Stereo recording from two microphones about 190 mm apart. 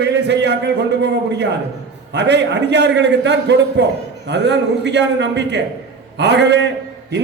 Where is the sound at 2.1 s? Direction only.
65° right (ahead or behind).